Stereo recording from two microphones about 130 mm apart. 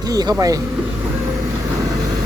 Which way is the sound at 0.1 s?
30° right (ahead or behind).